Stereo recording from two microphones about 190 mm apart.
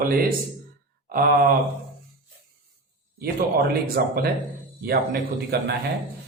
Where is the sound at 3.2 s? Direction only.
55° right (ahead or behind).